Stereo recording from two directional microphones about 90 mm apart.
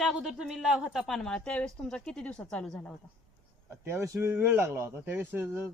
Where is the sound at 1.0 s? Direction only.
5° left (ahead or behind).